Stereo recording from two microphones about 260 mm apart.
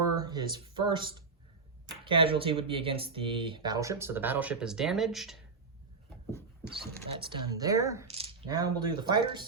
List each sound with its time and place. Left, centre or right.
0.0 s a sound: centre
2.0 s speech: centre
7.2 s speech: centre